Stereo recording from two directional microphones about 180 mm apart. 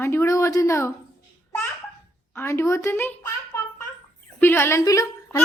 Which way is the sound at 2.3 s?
15° left (ahead or behind).